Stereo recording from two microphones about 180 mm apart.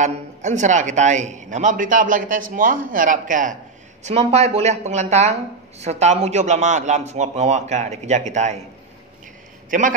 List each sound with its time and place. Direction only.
0.0 s a man's voice: 40° right (ahead or behind)
4.0 s speech: 35° right (ahead or behind)
9.7 s a man's voice: 45° right (ahead or behind)